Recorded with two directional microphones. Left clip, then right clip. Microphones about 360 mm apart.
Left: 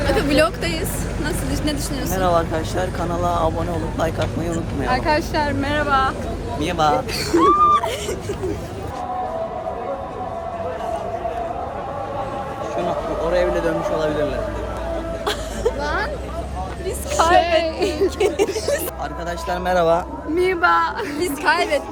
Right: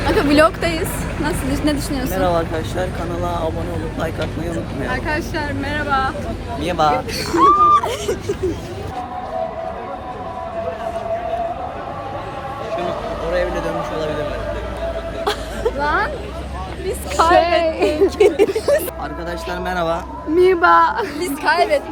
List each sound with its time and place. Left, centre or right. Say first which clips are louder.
0.0 s speech: right 4 dB; centre
2.0 s speech: even; centre
6.6 s a woman's voice: right 2 dB; centre
13.3 s a sound: left 1 dB; left
15.2 s a sound: right 3 dB; centre
15.8 s a sound: right 5 dB; centre
17.2 s a woman's voice: right 2 dB; centre
17.6 s a woman's voice: right 4 dB; centre
18.2 s a woman's voice: right 6 dB; centre
19.5 s speech: left 4 dB; centre
20.3 s a woman's voice: right 5 dB; centre